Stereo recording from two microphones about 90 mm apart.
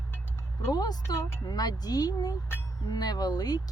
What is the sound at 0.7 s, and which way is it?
Speech, 45° left (ahead or behind).